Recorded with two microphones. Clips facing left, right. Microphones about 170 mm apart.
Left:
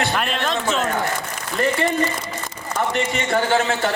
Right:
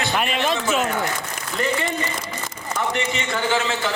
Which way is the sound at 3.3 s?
50° left (ahead or behind).